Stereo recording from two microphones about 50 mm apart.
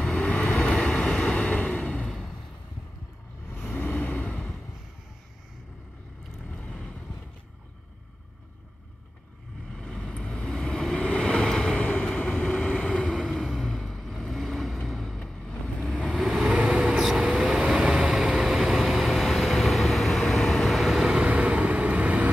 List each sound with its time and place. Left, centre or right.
0.1 s vehicle: left
2.0 s a sound: centre
3.5 s vehicle: left
9.7 s vehicle: centre
11.0 s vehicle: left
11.3 s waves: centre
11.8 s vehicle: left
12.1 s vehicle: left
13.1 s vehicle: centre
15.8 s vehicle: centre
16.3 s vehicle: right
16.7 s vehicle: centre
21.1 s vehicle: right